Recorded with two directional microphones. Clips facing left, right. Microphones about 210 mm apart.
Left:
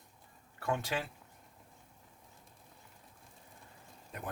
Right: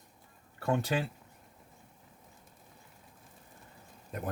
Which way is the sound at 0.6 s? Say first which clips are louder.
Right 5 dB; 35° right (ahead or behind).